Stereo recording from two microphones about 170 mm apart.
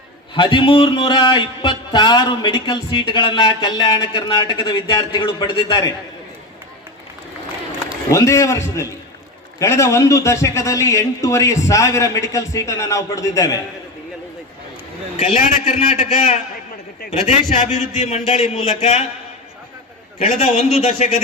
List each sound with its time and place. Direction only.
0.3 s speech: 30° left (ahead or behind)
8.1 s a man's voice: 15° left (ahead or behind)
15.2 s a man's voice: 45° left (ahead or behind)
20.1 s a man's voice: 45° left (ahead or behind)
20.6 s speech: centre (ahead or behind)
20.8 s a man's voice: 40° left (ahead or behind)